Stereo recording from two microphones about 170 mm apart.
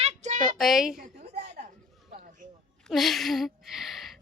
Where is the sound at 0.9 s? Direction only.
50° right (ahead or behind).